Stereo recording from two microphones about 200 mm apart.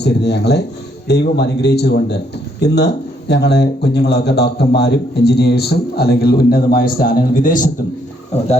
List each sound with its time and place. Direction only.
0.0 s speech: 55° left (ahead or behind)